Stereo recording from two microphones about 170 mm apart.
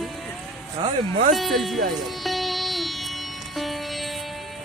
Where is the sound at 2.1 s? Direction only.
Centre (ahead or behind).